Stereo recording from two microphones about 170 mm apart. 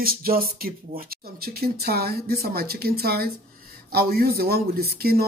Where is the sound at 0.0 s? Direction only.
60° right (ahead or behind).